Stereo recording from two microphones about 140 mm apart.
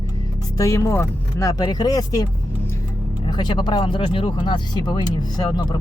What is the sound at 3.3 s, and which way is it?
Speech, 30° left (ahead or behind).